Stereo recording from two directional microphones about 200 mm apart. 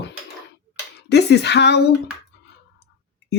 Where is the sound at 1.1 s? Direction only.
60° left (ahead or behind).